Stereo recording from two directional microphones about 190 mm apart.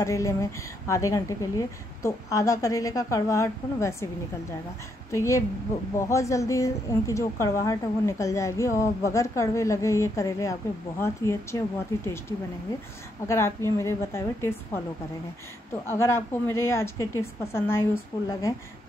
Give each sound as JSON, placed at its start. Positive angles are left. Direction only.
{"t": 0.0, "sound": "a woman's voice", "side_deg": 15}
{"t": 15.8, "sound": "a woman's voice", "side_deg": 15}